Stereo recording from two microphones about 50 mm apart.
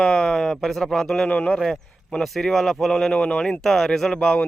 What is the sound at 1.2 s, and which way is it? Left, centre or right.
Speech, left.